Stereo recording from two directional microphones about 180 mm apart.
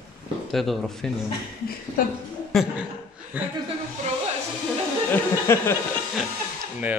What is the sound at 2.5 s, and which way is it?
Speech, centre (ahead or behind).